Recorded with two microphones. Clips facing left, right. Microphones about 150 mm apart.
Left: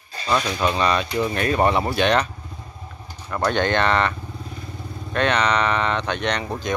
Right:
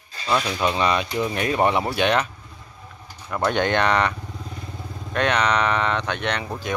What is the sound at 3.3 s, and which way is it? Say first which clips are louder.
Speech: even; 5° right (ahead or behind).